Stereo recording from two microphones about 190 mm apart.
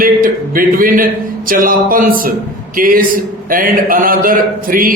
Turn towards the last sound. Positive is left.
turn(degrees=-50)  # may be behind; listen again after turning